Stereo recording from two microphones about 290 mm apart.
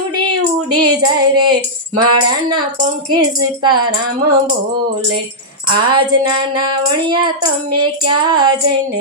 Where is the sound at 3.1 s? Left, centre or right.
Centre.